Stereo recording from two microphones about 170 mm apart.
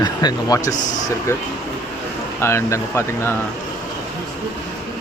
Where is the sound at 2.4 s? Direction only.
15° left (ahead or behind).